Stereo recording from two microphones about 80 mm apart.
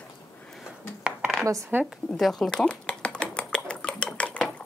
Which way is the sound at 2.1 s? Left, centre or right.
Centre.